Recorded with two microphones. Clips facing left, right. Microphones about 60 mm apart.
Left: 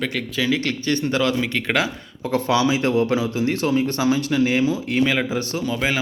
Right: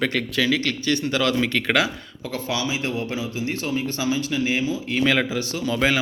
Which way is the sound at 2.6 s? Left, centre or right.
Left.